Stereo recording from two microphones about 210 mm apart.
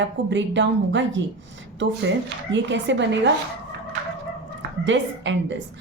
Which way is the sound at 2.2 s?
60° right (ahead or behind).